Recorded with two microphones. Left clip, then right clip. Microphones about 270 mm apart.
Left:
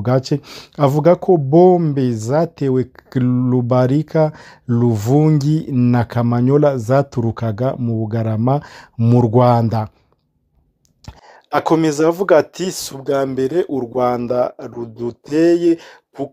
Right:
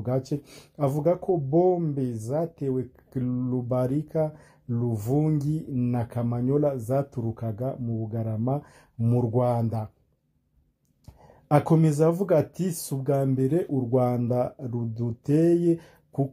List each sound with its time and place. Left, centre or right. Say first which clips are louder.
0.0 s speech: left 11 dB; left
11.6 s speech: left 9 dB; left